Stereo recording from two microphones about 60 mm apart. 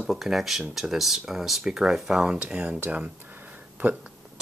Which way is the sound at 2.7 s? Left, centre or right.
Right.